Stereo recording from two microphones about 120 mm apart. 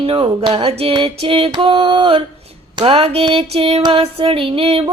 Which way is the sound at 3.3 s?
55° right (ahead or behind).